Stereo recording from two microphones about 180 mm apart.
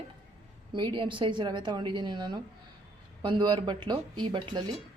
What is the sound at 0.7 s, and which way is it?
A woman's voice, 25° right (ahead or behind).